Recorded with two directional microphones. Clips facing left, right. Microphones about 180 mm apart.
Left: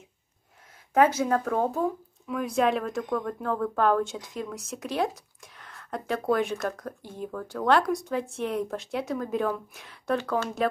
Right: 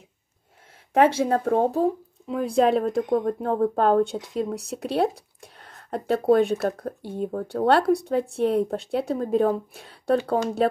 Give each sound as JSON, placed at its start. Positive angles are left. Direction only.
{"t": 0.9, "sound": "speech", "side_deg": -30}